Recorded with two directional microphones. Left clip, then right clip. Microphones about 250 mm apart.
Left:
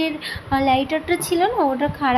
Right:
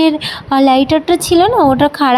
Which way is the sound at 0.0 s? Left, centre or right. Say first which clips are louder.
Right 11 dB; right.